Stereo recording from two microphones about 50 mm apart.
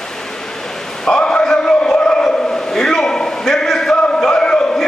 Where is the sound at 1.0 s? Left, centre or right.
Centre.